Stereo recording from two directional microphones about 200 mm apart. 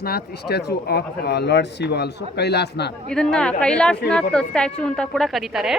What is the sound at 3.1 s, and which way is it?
A woman's voice, 5° left (ahead or behind).